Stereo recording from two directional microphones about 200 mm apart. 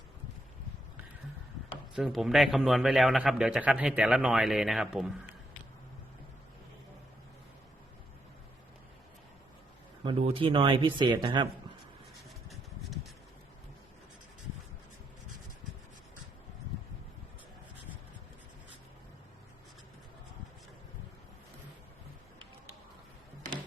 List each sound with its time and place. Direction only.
2.0 s speech: centre (ahead or behind)
10.0 s speech: 25° right (ahead or behind)
12.5 s a sound: centre (ahead or behind)